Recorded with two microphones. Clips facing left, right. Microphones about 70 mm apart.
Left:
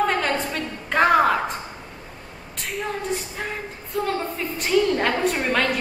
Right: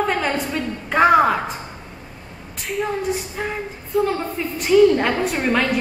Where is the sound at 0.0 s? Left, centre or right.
Centre.